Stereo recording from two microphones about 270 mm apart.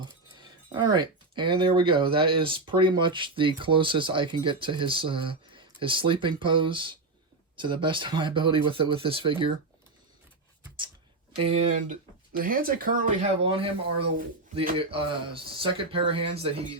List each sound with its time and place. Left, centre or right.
0.3 s speech: centre
11.4 s speech: right